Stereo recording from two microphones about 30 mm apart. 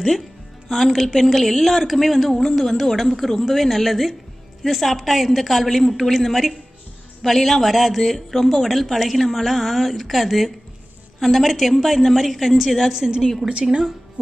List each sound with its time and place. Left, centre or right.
0.7 s a woman's voice: centre
12.9 s a woman's voice: right